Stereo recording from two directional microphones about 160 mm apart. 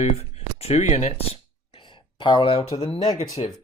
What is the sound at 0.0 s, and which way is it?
Speech, 45° left (ahead or behind).